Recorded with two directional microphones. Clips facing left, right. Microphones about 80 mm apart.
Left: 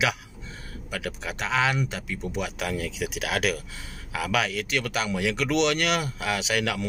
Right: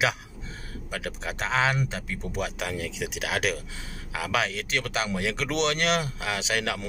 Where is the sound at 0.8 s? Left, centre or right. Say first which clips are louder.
Left 1 dB; right.